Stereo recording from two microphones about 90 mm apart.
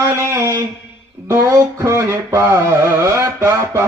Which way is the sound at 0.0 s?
30° right (ahead or behind).